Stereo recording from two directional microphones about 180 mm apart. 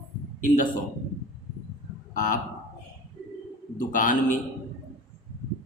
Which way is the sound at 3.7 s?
50° left (ahead or behind).